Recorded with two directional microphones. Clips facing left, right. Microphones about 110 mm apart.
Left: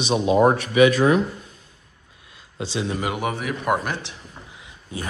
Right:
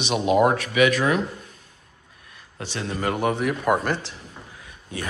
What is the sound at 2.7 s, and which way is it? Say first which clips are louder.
Speech: even; 10° left (ahead or behind).